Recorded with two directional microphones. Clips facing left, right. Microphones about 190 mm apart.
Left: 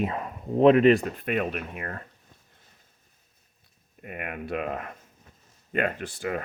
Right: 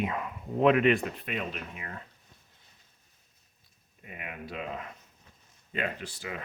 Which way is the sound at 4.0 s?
60° left (ahead or behind).